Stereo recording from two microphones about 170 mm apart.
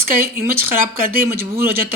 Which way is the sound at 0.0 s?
60° right (ahead or behind).